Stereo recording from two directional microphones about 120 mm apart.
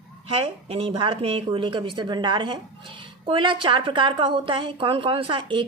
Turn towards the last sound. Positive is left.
turn(degrees=-45)  # may be behind; listen again after turning